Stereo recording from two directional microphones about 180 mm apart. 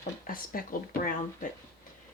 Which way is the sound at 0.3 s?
50° left (ahead or behind).